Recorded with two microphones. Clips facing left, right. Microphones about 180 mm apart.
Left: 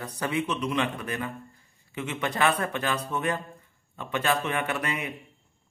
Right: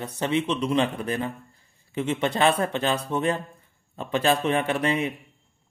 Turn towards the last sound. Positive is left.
turn(degrees=-30)  # may be behind; listen again after turning